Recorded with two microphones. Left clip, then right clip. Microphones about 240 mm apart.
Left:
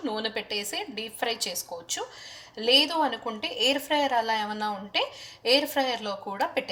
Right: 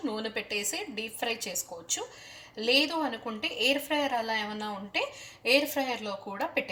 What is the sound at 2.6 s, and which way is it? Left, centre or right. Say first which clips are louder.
Speech: left 4 dB; left.